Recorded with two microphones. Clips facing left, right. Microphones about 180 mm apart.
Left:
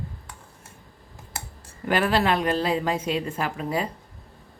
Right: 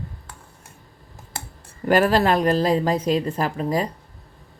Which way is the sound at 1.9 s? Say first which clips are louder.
Right 5 dB; 40° right (ahead or behind).